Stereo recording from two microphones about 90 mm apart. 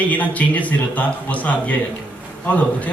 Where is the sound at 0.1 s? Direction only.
15° left (ahead or behind).